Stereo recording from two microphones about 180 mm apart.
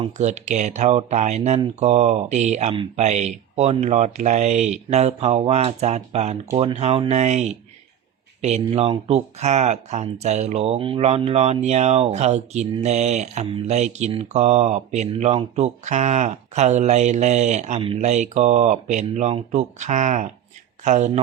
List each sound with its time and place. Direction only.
0.2 s speech: 40° right (ahead or behind)